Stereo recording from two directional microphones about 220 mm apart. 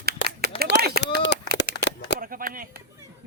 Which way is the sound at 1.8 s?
55° left (ahead or behind).